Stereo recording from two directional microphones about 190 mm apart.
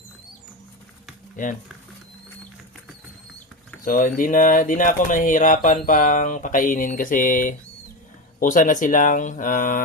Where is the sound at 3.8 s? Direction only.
45° left (ahead or behind).